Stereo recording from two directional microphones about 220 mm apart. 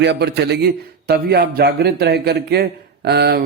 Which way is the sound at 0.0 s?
50° right (ahead or behind).